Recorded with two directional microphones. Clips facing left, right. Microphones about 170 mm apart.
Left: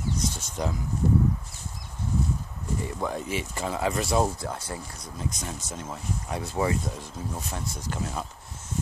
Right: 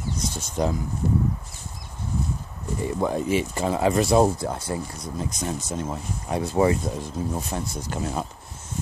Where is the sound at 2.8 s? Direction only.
25° right (ahead or behind).